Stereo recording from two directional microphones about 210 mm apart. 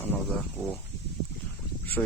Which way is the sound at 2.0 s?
Centre (ahead or behind).